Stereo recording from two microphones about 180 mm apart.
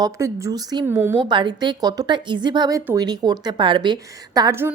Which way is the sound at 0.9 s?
10° right (ahead or behind).